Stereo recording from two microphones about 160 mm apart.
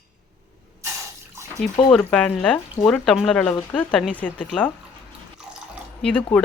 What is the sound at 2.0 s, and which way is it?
Speech, 10° left (ahead or behind).